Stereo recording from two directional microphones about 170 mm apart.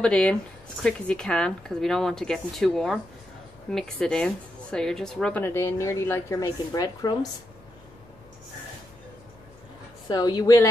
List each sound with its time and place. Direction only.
0.0 s speech: 5° left (ahead or behind); by 7.2 s 20° left (ahead or behind)
10.0 s a woman's voice: 25° left (ahead or behind)